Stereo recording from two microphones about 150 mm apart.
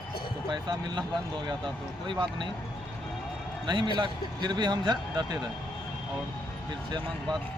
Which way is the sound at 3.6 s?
30° right (ahead or behind).